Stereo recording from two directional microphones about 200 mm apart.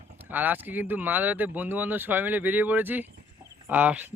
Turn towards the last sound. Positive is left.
turn(degrees=-10)  # may be behind; listen again after turning